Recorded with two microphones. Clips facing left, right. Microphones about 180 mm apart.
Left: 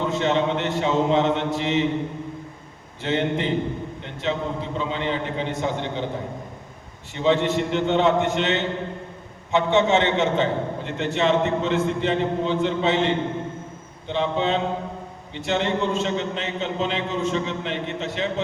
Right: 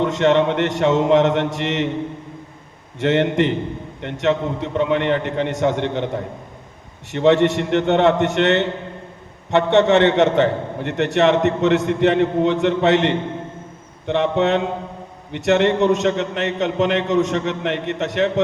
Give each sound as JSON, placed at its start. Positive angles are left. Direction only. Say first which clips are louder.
{"t": 0.0, "sound": "a man's voice", "louder": "right 6 dB", "side_deg": -75}
{"t": 3.0, "sound": "a man's voice", "louder": "right 7 dB", "side_deg": -70}
{"t": 7.1, "sound": "a man's voice", "louder": "right 6 dB", "side_deg": -70}